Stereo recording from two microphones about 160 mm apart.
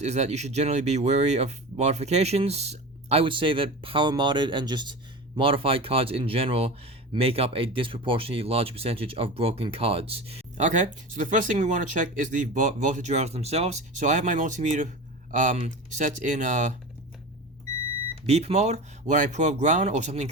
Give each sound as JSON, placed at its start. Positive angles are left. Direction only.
{"t": 0.0, "sound": "speech", "side_deg": -45}
{"t": 18.3, "sound": "speech", "side_deg": -40}